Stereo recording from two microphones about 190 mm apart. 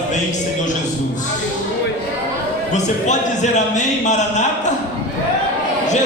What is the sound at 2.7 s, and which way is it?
Speech, 40° left (ahead or behind).